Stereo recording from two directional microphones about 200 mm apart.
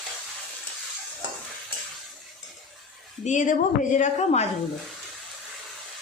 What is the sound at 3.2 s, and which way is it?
A woman's voice, 40° left (ahead or behind).